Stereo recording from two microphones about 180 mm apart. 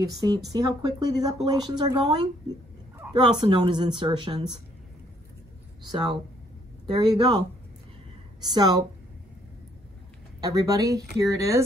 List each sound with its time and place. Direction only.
0.0 s speech: 20° right (ahead or behind)
7.0 s speech: 25° right (ahead or behind)
10.4 s speech: 20° right (ahead or behind)